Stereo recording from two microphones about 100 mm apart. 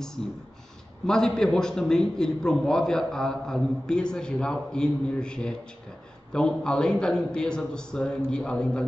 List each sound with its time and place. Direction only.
1.0 s a man's voice: 5° left (ahead or behind)